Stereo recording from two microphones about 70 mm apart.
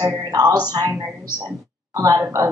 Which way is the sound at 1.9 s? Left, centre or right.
Right.